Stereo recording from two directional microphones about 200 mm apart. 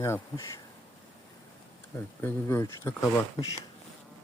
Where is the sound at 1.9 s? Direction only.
10° left (ahead or behind).